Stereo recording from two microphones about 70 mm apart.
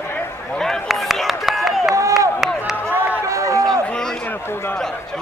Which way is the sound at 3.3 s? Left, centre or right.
Right.